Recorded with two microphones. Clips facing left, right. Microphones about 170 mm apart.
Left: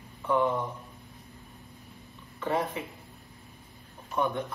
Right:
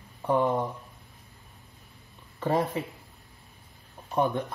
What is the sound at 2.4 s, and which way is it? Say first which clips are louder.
Speech: right 3 dB; 35° right (ahead or behind).